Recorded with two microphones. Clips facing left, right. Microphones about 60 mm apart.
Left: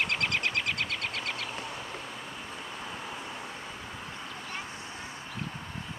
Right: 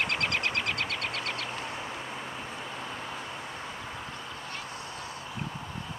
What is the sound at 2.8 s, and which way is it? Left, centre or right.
Vehicle, centre.